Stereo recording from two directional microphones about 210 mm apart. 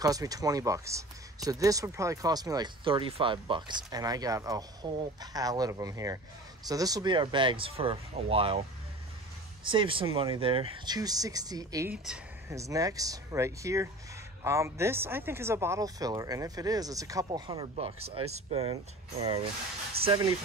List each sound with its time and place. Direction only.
0.0 s speech: 15° right (ahead or behind)
9.7 s speech: 25° right (ahead or behind)
20.1 s speech: 15° right (ahead or behind)